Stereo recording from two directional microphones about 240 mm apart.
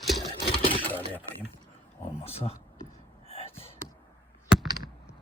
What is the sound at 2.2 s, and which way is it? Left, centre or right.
Speech, left.